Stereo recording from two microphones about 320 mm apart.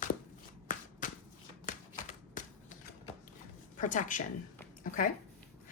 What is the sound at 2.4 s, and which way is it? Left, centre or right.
Typewriter, left.